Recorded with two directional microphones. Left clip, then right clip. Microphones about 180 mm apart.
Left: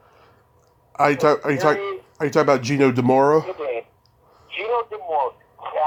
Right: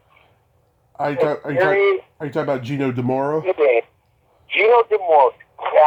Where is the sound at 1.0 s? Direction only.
25° left (ahead or behind).